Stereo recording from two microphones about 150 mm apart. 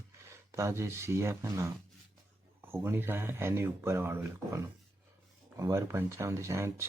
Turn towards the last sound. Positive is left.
turn(degrees=-20)  # may be behind; listen again after turning